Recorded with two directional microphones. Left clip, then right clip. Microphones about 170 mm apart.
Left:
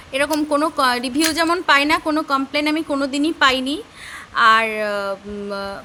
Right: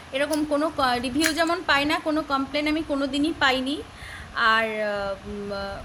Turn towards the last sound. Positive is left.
turn(degrees=35)  # may be behind; listen again after turning